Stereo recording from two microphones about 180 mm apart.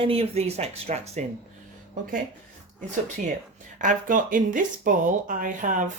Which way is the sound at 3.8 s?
45° right (ahead or behind).